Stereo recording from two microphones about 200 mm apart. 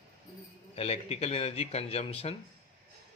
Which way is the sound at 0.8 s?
30° left (ahead or behind).